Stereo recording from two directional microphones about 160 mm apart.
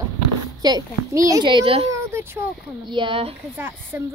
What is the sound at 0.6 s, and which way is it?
A child's voice, 25° right (ahead or behind).